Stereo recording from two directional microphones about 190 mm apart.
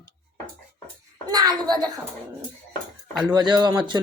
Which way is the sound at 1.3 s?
20° right (ahead or behind).